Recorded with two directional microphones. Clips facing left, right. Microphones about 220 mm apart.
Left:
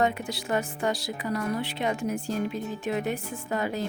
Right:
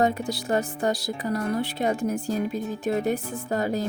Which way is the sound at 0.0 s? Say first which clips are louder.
Right 3 dB; 40° right (ahead or behind).